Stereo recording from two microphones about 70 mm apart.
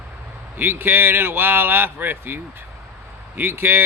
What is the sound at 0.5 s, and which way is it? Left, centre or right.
A man's voice, right.